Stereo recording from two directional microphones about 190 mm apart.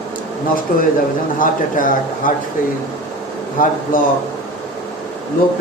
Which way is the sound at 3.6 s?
45° left (ahead or behind).